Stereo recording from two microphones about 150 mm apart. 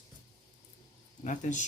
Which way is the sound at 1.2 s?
55° left (ahead or behind).